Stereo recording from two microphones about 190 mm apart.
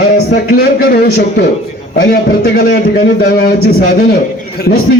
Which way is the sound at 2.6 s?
50° left (ahead or behind).